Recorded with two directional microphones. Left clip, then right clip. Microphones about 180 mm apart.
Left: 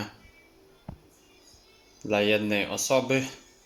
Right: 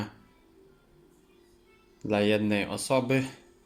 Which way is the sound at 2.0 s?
10° right (ahead or behind).